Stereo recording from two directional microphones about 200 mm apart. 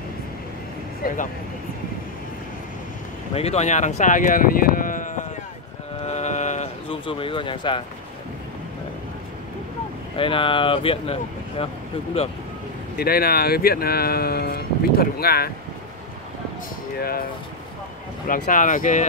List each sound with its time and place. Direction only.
1.0 s speech: 40° left (ahead or behind)
3.3 s speech: 30° left (ahead or behind)
6.0 s a sound: 35° left (ahead or behind)
10.1 s speech: 25° left (ahead or behind)
12.9 s speech: 50° left (ahead or behind)
18.3 s speech: 40° left (ahead or behind)